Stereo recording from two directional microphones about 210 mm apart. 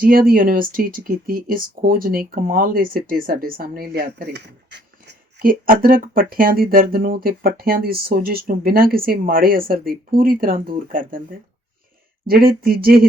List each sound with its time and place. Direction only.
0.0 s speech: 45° right (ahead or behind)
12.3 s speech: 45° right (ahead or behind)